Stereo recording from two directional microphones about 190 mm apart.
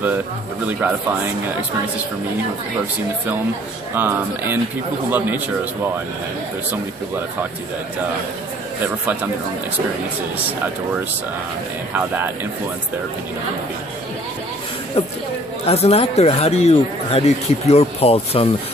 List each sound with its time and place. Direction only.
0.7 s speech: 10° right (ahead or behind)
3.9 s speech: 10° right (ahead or behind)
8.8 s speech: 10° right (ahead or behind)
15.0 s speech: 30° left (ahead or behind)